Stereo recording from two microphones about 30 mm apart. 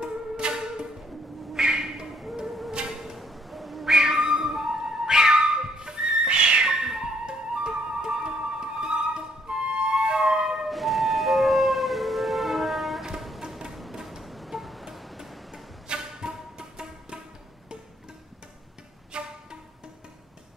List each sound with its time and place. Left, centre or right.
0.0 s music: right
1.5 s a sound: centre
3.2 s a sound: centre
3.8 s cat: centre
5.0 s music: right
6.2 s cat: right
6.8 s music: right
10.7 s music: centre
14.0 s music: centre
16.0 s music: right
19.1 s music: right